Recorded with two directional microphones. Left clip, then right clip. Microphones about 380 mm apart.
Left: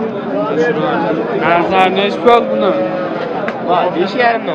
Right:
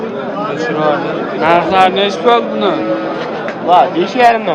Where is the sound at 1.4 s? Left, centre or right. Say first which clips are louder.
Right 2 dB; centre.